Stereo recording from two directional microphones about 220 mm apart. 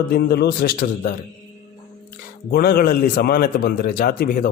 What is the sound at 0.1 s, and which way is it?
A man's voice, 45° left (ahead or behind).